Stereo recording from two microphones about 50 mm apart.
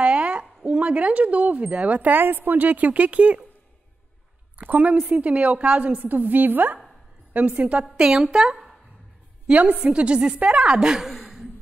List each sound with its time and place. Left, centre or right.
0.0 s a sound: right
0.7 s a woman's voice: right
2.1 s a woman's voice: right
4.6 s a woman's voice: right
7.9 s speech: centre
9.5 s a woman's voice: right